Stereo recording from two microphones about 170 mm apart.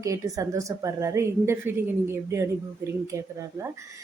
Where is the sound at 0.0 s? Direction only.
20° right (ahead or behind).